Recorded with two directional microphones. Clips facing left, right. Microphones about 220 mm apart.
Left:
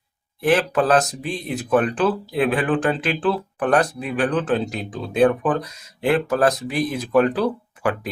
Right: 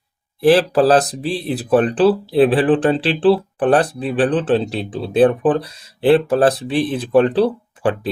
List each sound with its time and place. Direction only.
0.4 s speech: 35° right (ahead or behind)